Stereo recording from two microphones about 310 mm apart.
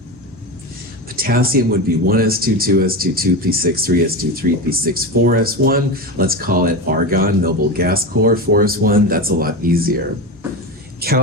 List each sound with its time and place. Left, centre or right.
1.1 s speech: right
11.0 s speech: right